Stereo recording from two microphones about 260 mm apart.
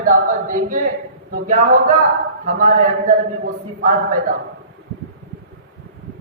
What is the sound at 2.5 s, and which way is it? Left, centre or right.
Speech, right.